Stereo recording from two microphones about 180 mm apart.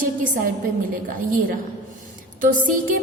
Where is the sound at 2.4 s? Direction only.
50° right (ahead or behind).